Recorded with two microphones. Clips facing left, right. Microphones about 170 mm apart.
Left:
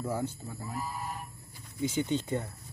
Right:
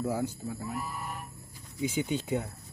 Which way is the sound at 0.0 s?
10° right (ahead or behind).